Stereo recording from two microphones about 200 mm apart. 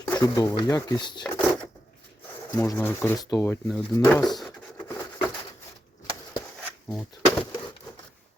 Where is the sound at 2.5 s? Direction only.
15° left (ahead or behind).